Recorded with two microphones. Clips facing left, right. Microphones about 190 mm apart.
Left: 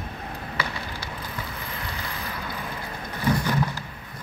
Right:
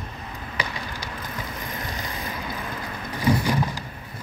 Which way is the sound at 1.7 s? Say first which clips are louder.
Right 2 dB; 15° right (ahead or behind).